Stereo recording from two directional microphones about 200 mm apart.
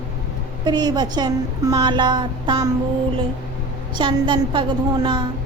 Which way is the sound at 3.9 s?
25° right (ahead or behind).